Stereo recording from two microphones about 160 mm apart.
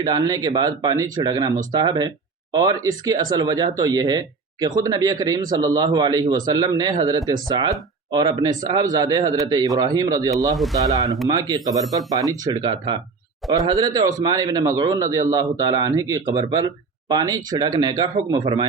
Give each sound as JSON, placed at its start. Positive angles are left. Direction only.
{"t": 0.0, "sound": "a man's voice", "side_deg": -25}
{"t": 10.5, "sound": "speech", "side_deg": 0}
{"t": 10.8, "sound": "a man's voice", "side_deg": -20}